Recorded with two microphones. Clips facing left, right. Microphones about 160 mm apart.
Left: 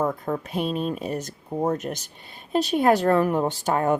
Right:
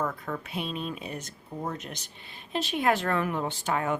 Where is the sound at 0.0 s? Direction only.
35° left (ahead or behind).